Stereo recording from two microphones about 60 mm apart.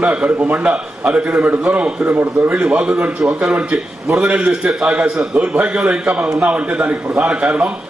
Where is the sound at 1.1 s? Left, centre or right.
Right.